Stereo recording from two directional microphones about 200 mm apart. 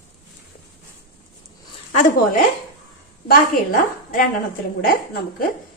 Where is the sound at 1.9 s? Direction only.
40° left (ahead or behind).